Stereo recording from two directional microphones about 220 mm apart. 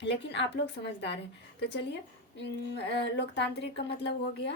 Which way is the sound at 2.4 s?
50° left (ahead or behind).